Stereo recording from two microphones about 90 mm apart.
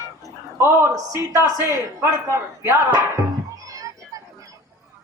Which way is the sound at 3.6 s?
40° right (ahead or behind).